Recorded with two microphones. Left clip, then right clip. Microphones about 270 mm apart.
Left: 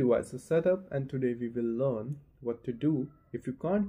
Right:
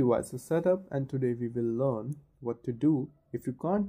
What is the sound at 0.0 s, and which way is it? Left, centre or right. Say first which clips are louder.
Speech: even; right.